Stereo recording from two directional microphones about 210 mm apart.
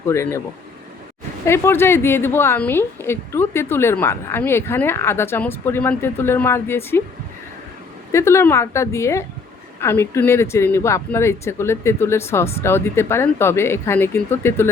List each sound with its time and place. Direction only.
0.1 s a woman's voice: 15° left (ahead or behind)
1.5 s a woman's voice: 10° left (ahead or behind)
8.1 s a woman's voice: 15° left (ahead or behind)